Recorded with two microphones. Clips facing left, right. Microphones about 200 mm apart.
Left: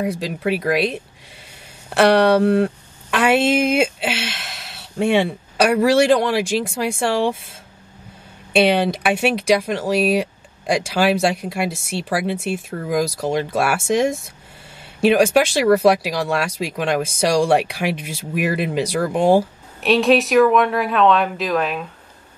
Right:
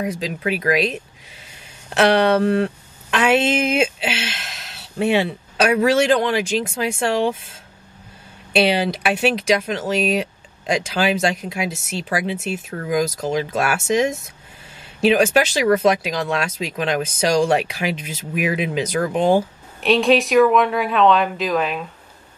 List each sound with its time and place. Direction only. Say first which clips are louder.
0.0 s speech: left 2 dB; 5° left (ahead or behind)
4.9 s speech: left 1 dB; 5° right (ahead or behind)
5.7 s speech: left 2 dB; 5° left (ahead or behind)
8.5 s speech: left 2 dB; 5° right (ahead or behind)
9.1 s speech: left 1 dB; 10° left (ahead or behind)
14.8 s a sound: left 1 dB; 5° right (ahead or behind)
15.6 s speech: left 3 dB; 5° left (ahead or behind)